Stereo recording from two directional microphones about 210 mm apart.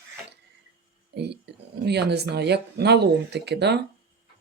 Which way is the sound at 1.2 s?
55° right (ahead or behind).